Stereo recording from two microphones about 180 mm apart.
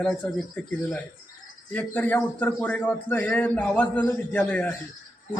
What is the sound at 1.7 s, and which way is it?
A man's voice, 10° left (ahead or behind).